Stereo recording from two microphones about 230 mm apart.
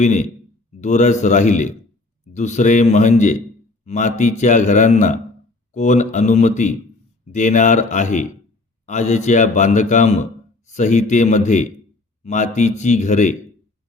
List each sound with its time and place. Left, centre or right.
0.0 s a man's voice: left